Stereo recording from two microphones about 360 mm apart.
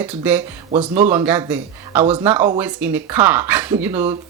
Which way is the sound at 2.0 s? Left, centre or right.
Centre.